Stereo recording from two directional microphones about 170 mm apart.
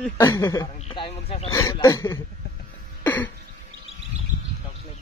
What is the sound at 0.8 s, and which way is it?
Speech, 35° left (ahead or behind).